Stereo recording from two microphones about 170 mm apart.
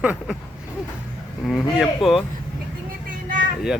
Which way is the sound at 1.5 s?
Centre (ahead or behind).